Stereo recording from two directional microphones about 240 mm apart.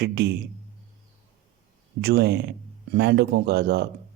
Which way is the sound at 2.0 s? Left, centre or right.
Right.